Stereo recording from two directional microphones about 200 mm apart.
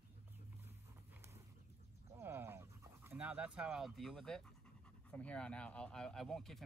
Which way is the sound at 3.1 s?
5° right (ahead or behind).